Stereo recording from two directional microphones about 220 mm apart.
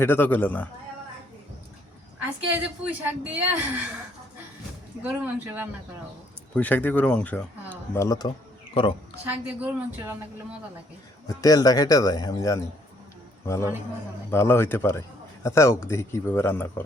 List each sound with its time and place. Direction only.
0.0 s speech: 10° left (ahead or behind)
3.0 s a woman's voice: 5° right (ahead or behind)
5.0 s a woman's voice: 5° right (ahead or behind)
6.5 s a woman's voice: 5° left (ahead or behind); by 9.0 s 25° left (ahead or behind)
9.2 s a woman's voice: 10° right (ahead or behind)
11.3 s a man's voice: 15° left (ahead or behind)